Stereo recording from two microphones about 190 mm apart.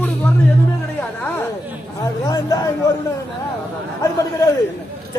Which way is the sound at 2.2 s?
20° left (ahead or behind).